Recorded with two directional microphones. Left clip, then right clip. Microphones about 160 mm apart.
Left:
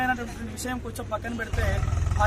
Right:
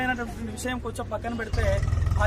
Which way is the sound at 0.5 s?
25° right (ahead or behind).